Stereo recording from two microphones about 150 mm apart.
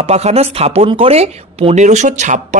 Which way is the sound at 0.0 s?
45° right (ahead or behind).